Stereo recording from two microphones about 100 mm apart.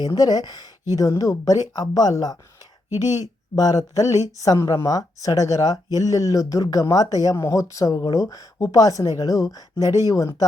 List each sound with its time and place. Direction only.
0.0 s speech: 40° left (ahead or behind)
3.5 s speech: 35° left (ahead or behind)